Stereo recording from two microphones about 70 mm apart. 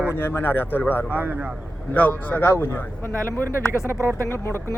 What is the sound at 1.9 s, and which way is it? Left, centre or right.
Speech, left.